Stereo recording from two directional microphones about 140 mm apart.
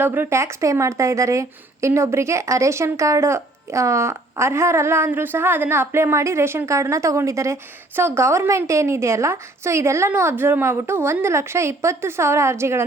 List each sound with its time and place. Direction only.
0.0 s a woman's voice: 15° right (ahead or behind)